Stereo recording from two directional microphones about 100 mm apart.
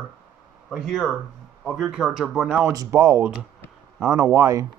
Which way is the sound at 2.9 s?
25° right (ahead or behind).